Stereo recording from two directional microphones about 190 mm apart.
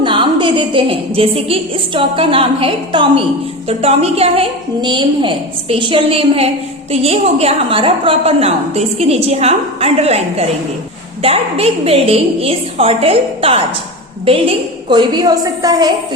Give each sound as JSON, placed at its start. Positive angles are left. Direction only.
{"t": 0.0, "sound": "a woman's voice", "side_deg": -25}